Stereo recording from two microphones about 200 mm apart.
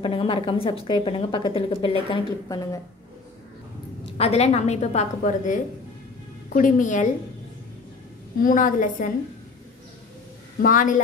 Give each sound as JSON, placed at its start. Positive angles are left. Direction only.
{"t": 0.0, "sound": "a woman's voice", "side_deg": 25}
{"t": 4.0, "sound": "a woman's voice", "side_deg": 30}
{"t": 8.4, "sound": "a woman's voice", "side_deg": 40}
{"t": 10.6, "sound": "a woman's voice", "side_deg": 40}